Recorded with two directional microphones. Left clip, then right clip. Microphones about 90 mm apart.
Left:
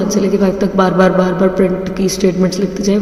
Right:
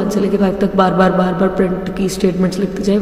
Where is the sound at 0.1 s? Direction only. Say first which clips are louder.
Left 3 dB; 25° left (ahead or behind).